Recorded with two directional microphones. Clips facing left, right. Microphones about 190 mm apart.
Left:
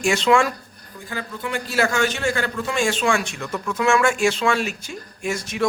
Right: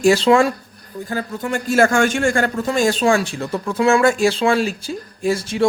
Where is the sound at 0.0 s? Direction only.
35° right (ahead or behind).